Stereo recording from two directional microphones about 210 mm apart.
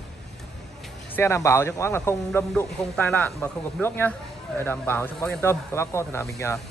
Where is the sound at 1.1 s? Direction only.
15° left (ahead or behind).